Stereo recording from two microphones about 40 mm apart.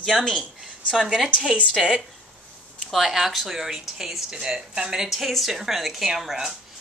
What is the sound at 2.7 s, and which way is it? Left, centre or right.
A woman's voice, centre.